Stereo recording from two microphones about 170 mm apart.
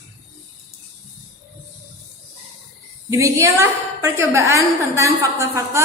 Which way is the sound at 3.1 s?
15° right (ahead or behind).